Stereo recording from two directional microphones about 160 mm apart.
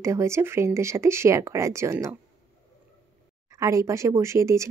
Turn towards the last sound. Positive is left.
turn(degrees=-20)  # may be behind; listen again after turning